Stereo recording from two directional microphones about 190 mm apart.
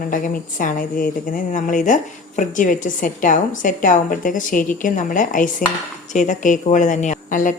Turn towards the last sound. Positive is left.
turn(degrees=45)  # may be behind; listen again after turning